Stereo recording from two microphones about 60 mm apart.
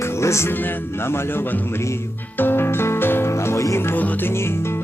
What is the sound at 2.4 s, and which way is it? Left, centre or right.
Music, left.